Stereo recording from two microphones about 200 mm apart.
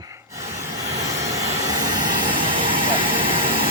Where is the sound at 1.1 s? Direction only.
15° right (ahead or behind).